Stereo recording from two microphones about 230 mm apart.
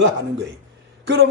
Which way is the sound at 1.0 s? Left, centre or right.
Right.